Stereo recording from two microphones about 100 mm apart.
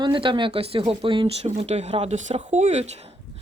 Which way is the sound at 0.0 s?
55° right (ahead or behind).